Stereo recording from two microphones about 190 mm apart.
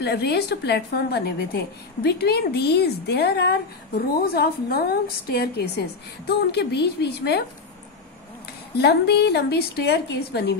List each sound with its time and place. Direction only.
0.0 s a woman's voice: 60° left (ahead or behind)
8.7 s a woman's voice: 60° left (ahead or behind)